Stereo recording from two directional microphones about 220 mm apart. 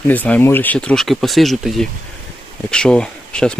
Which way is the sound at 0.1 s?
10° left (ahead or behind).